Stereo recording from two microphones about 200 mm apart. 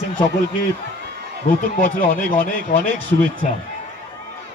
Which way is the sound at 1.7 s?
40° left (ahead or behind).